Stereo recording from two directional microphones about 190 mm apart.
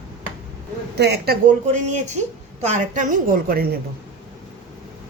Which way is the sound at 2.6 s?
40° right (ahead or behind).